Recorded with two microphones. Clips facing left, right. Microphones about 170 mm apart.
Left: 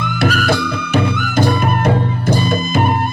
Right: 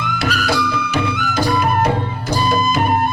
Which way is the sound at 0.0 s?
55° left (ahead or behind).